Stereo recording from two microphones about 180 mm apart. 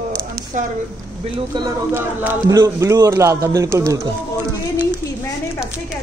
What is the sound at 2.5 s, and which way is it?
A man's voice, 15° right (ahead or behind).